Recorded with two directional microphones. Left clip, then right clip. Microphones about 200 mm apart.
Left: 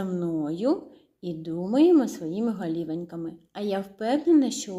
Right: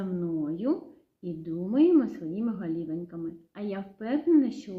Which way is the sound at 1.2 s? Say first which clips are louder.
Left 3 dB; centre (ahead or behind).